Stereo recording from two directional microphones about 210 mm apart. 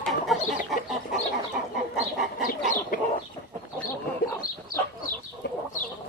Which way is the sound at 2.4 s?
45° left (ahead or behind).